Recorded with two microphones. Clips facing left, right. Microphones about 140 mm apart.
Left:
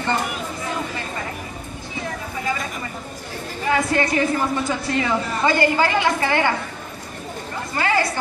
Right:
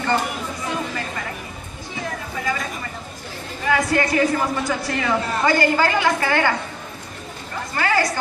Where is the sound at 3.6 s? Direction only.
25° left (ahead or behind).